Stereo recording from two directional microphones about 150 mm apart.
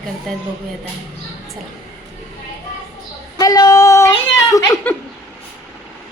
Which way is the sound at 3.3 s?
25° left (ahead or behind).